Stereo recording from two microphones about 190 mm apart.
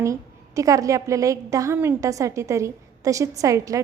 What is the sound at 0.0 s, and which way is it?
A woman's voice, 15° right (ahead or behind).